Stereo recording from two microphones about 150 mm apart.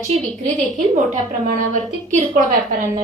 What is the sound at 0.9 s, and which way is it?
A woman's voice, 60° right (ahead or behind).